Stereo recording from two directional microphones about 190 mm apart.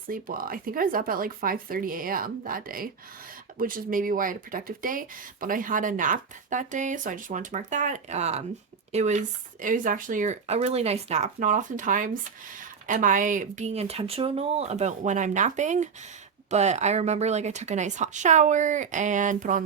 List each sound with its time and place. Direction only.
0.1 s speech: 50° right (ahead or behind)